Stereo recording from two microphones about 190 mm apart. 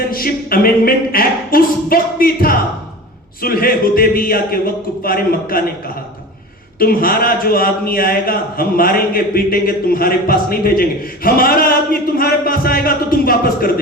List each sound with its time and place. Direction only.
0.0 s a sound: 50° left (ahead or behind)
3.4 s a man's voice: 50° left (ahead or behind)
6.7 s a man's voice: 50° left (ahead or behind)